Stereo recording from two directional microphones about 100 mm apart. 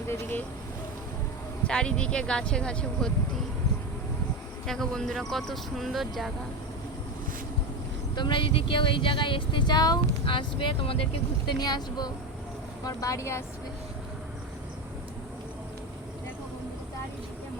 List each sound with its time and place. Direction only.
0.1 s speech: 20° left (ahead or behind)
1.6 s speech: 10° left (ahead or behind)
4.6 s speech: 5° left (ahead or behind)
8.1 s speech: 55° left (ahead or behind); by 11.5 s 70° left (ahead or behind)
11.6 s speech: 45° left (ahead or behind)